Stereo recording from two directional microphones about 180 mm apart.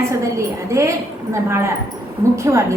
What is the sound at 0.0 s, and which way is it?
A woman's voice, 15° right (ahead or behind).